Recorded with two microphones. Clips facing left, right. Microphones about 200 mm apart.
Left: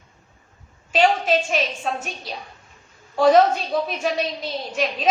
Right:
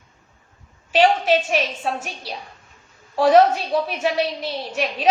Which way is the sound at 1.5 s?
5° right (ahead or behind).